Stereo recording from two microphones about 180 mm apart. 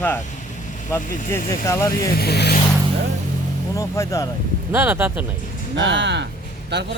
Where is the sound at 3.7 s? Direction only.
15° left (ahead or behind).